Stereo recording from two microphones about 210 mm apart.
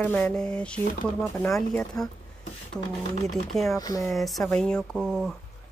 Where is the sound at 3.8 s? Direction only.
15° left (ahead or behind).